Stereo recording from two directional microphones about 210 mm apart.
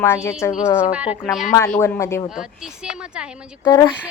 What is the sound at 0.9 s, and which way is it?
Speech, 5° right (ahead or behind).